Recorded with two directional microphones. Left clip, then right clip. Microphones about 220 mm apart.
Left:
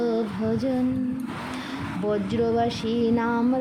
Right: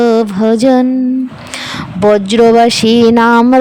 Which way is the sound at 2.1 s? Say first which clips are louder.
Right 18 dB; 45° right (ahead or behind).